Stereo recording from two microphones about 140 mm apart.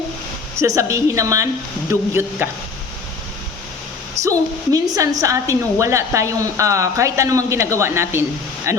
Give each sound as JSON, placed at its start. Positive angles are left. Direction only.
{"t": 0.6, "sound": "a woman's voice", "side_deg": -20}
{"t": 4.2, "sound": "a woman's voice", "side_deg": -25}